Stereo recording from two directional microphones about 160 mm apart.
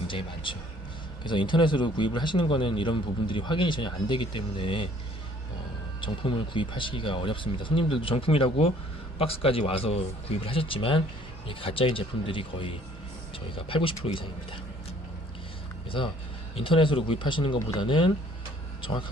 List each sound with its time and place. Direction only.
0.1 s speech: 30° left (ahead or behind)
6.0 s speech: 30° left (ahead or behind)
16.6 s speech: 35° left (ahead or behind)